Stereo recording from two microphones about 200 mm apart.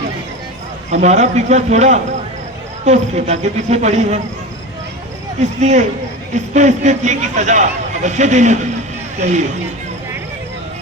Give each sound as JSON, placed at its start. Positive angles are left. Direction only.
{"t": 0.9, "sound": "speech", "side_deg": -35}
{"t": 5.5, "sound": "speech", "side_deg": -35}